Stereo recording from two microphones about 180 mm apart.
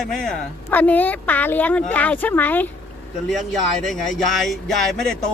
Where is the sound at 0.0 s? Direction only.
5° left (ahead or behind).